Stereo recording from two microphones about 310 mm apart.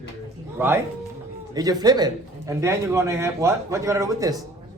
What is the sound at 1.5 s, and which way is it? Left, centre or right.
Speech, centre.